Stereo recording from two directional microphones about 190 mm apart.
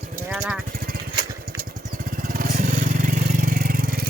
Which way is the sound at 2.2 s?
45° right (ahead or behind).